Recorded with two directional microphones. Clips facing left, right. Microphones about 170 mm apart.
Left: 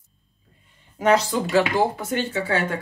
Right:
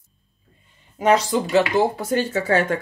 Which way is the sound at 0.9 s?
20° right (ahead or behind).